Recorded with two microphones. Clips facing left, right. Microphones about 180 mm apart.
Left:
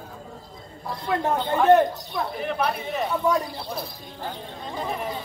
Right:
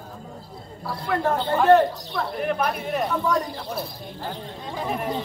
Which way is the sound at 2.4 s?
5° right (ahead or behind).